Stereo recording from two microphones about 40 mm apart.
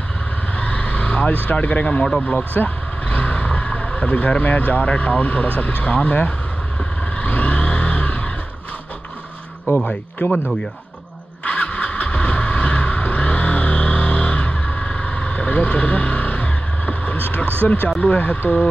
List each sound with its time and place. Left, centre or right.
0.6 s vehicle: left
2.2 s speech: left
7.2 s vehicle: left
9.7 s speech: left
10.2 s speech: left
11.4 s vehicle: left
17.8 s speech: left